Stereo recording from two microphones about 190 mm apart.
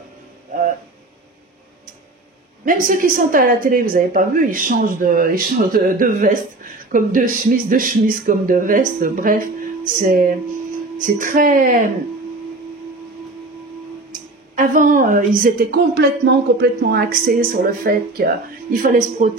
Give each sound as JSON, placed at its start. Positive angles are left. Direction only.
{"t": 2.6, "sound": "a woman's voice", "side_deg": -45}
{"t": 14.1, "sound": "a woman's voice", "side_deg": -45}